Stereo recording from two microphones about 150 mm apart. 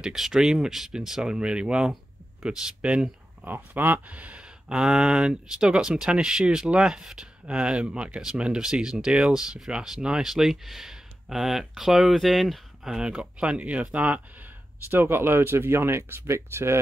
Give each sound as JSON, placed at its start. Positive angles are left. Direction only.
{"t": 0.0, "sound": "speech", "side_deg": 0}